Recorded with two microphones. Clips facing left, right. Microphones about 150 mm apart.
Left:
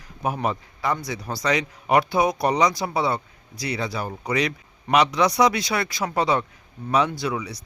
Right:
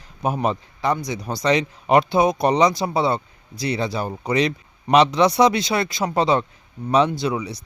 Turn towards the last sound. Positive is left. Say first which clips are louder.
# right 3 dB
turn(degrees=-25)  # may be behind; listen again after turning